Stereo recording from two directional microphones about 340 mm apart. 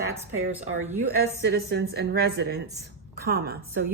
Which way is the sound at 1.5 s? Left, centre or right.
Right.